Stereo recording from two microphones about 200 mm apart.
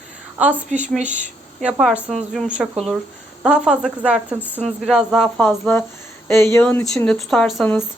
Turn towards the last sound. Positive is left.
turn(degrees=5)  # may be behind; listen again after turning